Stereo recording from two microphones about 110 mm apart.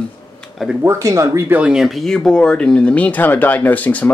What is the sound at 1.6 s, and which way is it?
Speech, 5° right (ahead or behind).